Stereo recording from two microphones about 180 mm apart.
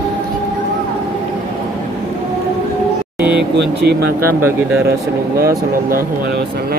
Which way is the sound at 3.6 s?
65° right (ahead or behind).